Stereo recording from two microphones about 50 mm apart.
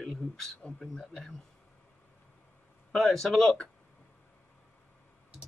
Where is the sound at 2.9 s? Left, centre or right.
Centre.